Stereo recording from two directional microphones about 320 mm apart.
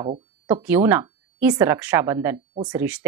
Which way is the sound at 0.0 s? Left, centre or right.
Centre.